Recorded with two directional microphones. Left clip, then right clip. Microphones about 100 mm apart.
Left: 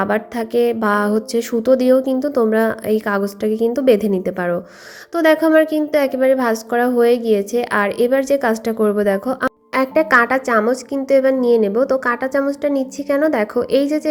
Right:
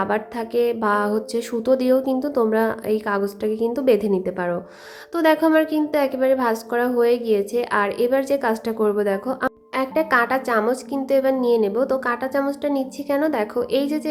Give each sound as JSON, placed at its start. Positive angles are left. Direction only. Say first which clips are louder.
{"t": 0.0, "sound": "a woman's voice", "louder": "left 4 dB", "side_deg": 25}
{"t": 9.7, "sound": "a woman's voice", "louder": "left 6 dB", "side_deg": 40}